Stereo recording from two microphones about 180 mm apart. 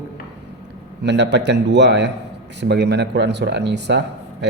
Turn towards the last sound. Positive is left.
turn(degrees=-70)  # may be behind; listen again after turning